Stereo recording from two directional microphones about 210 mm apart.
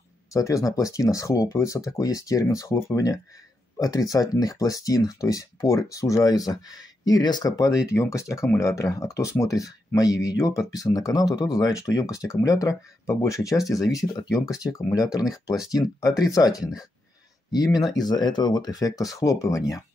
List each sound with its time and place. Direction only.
0.3 s speech: 15° left (ahead or behind)
17.7 s speech: 20° left (ahead or behind)